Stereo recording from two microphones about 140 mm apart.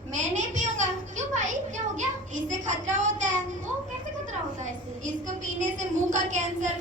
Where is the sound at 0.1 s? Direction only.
60° right (ahead or behind).